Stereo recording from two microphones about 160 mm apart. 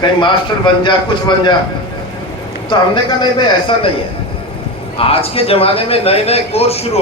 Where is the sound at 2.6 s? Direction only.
30° left (ahead or behind).